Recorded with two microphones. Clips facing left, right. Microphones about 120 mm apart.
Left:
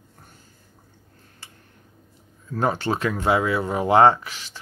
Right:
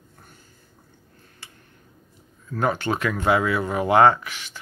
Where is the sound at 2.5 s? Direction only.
30° left (ahead or behind).